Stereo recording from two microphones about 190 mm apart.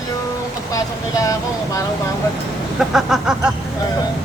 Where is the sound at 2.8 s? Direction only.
Centre (ahead or behind).